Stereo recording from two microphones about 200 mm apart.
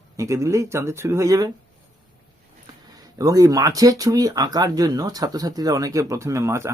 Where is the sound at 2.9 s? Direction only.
20° right (ahead or behind).